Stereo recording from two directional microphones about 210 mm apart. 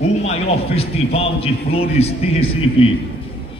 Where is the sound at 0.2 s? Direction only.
30° left (ahead or behind).